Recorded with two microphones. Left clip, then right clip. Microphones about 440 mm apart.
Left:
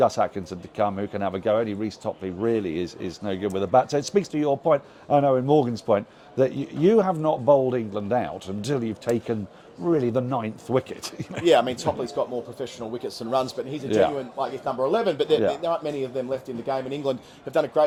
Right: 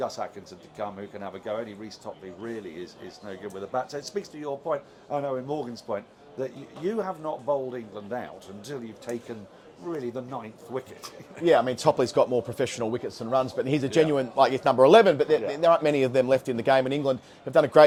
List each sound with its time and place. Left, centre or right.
0.0 s speech: left
11.4 s a man's voice: centre
11.9 s a man's voice: right
13.1 s speech: centre
13.7 s a man's voice: right
15.0 s a man's voice: centre
15.6 s a man's voice: right
17.0 s a man's voice: right